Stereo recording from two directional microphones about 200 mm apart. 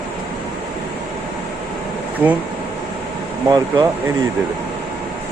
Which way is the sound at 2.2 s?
5° right (ahead or behind).